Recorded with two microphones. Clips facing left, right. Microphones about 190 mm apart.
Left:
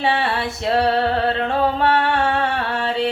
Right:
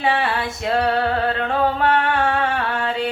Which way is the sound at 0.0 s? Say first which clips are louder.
Even; 30° left (ahead or behind).